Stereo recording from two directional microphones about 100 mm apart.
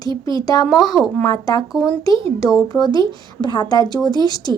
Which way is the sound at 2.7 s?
40° left (ahead or behind).